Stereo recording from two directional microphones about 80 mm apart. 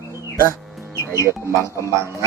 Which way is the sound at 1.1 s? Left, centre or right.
Right.